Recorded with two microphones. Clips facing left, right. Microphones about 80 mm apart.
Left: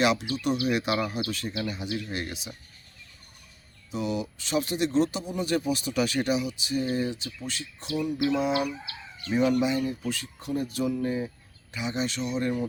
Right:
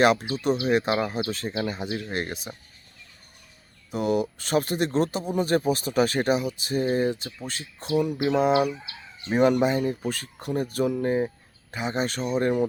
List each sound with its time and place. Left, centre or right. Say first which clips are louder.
0.0 s speech: right 4 dB; right
3.9 s speech: right 6 dB; right